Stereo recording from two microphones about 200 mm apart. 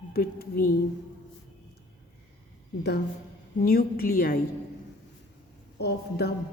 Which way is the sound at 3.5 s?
50° left (ahead or behind).